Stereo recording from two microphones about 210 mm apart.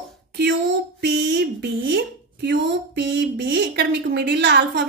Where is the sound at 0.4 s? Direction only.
55° right (ahead or behind).